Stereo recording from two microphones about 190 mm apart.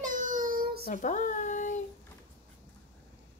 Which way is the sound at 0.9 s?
40° left (ahead or behind).